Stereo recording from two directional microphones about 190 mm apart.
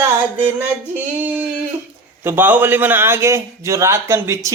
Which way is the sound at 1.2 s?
10° right (ahead or behind).